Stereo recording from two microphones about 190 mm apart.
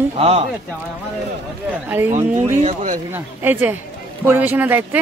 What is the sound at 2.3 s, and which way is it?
Speech, 35° right (ahead or behind).